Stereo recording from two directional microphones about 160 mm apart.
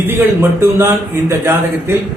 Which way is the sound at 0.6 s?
15° right (ahead or behind).